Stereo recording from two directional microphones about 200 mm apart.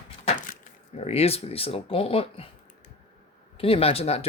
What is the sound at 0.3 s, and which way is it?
Speech, 40° left (ahead or behind).